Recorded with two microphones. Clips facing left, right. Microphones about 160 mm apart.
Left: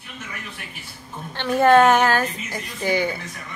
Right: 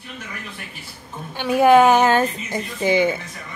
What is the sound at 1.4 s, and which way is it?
A woman's voice, 10° right (ahead or behind).